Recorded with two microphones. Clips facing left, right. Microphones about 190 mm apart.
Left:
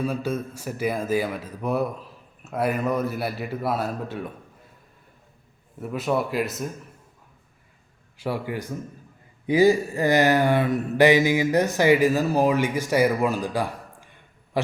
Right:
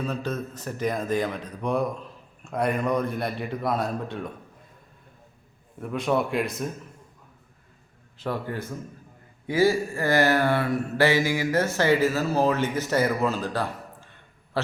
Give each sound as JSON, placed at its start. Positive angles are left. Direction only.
{"t": 0.0, "sound": "speech", "side_deg": 10}
{"t": 5.8, "sound": "speech", "side_deg": 5}
{"t": 8.2, "sound": "mantra", "side_deg": 10}